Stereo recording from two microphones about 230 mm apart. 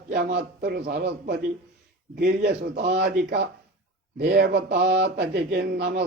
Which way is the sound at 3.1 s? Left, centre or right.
Right.